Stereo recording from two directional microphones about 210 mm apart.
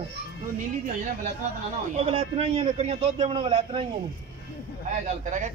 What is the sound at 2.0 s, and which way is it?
A man's voice, 30° right (ahead or behind).